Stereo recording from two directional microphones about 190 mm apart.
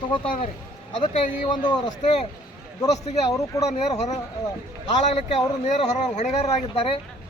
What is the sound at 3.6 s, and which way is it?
A man's voice, 35° left (ahead or behind).